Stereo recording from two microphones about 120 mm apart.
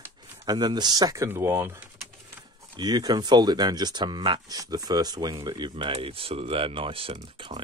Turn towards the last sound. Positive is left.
turn(degrees=-45)  # may be behind; listen again after turning